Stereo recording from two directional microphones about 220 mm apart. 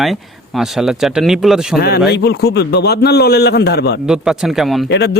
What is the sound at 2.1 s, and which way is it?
A man's voice, 50° left (ahead or behind).